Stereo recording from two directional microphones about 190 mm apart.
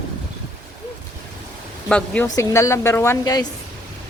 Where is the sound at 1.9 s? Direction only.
5° left (ahead or behind).